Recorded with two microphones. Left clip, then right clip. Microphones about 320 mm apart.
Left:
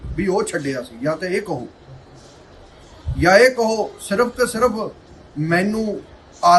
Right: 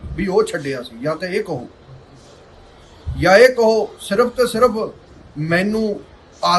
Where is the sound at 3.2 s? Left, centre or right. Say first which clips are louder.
Right 2 dB; centre.